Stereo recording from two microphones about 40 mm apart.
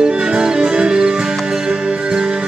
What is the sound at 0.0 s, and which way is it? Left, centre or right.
Music, centre.